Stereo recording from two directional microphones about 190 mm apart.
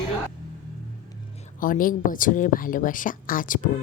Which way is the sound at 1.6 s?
45° left (ahead or behind).